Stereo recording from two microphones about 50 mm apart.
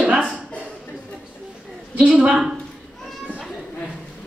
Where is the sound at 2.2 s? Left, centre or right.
Right.